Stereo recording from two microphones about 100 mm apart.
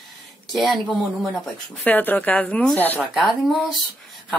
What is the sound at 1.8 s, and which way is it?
Speech, 20° left (ahead or behind).